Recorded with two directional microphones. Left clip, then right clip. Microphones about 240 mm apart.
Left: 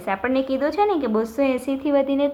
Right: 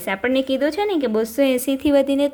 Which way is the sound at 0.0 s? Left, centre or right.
Right.